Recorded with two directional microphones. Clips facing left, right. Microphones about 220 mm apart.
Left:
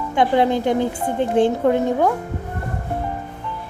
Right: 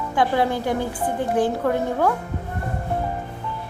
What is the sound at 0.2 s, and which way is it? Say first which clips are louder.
A woman's voice: left 4 dB; 20° left (ahead or behind).